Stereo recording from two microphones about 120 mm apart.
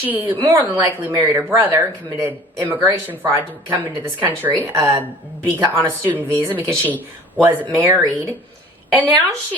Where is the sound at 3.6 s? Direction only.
20° right (ahead or behind).